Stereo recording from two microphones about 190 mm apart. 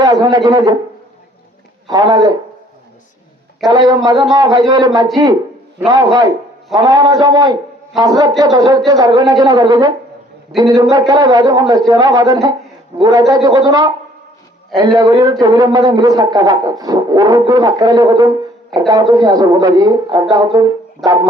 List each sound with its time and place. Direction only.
0.0 s speech: 20° right (ahead or behind)
1.9 s speech: 20° right (ahead or behind)
3.7 s speech: 20° right (ahead or behind)
14.9 s speech: 20° right (ahead or behind)